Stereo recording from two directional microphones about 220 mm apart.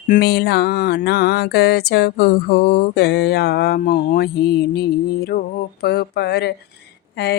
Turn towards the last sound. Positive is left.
turn(degrees=45)  # may be behind; listen again after turning